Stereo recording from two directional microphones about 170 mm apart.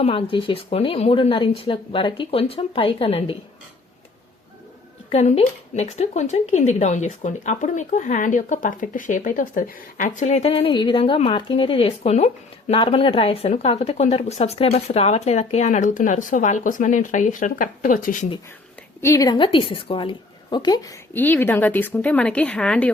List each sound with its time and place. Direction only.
0.0 s a woman's voice: 30° left (ahead or behind)
5.1 s a woman's voice: 40° left (ahead or behind)
19.0 s a woman's voice: 20° left (ahead or behind)